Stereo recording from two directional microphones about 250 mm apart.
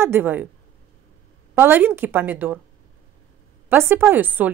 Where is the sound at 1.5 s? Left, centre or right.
Centre.